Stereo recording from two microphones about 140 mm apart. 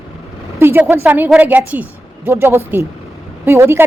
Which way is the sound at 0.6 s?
15° right (ahead or behind).